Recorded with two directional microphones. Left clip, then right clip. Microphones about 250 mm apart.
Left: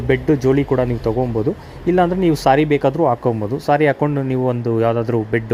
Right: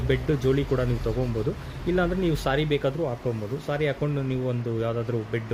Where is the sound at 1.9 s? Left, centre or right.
Left.